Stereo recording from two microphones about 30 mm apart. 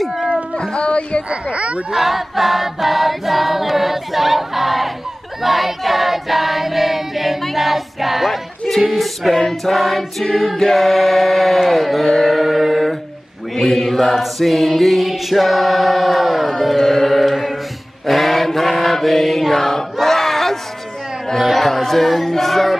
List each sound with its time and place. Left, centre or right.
0.0 s a sound: centre
0.6 s music: left
1.3 s speech: right
2.0 s choir: centre
7.5 s music: centre
8.6 s choir: centre
12.4 s choir: centre
13.6 s choir: centre
16.7 s music: centre
18.0 s mantra: centre
19.5 s choir: centre
21.5 s speech: centre